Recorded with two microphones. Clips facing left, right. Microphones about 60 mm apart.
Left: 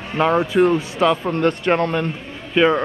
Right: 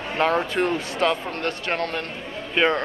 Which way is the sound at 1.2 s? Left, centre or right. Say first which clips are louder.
Left 9 dB; left.